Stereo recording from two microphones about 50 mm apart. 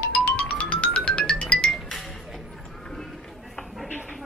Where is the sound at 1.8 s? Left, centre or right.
Centre.